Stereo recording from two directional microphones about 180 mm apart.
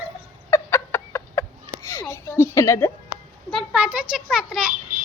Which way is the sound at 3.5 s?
5° right (ahead or behind).